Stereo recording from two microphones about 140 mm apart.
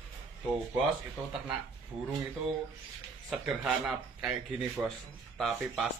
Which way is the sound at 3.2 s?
5° right (ahead or behind).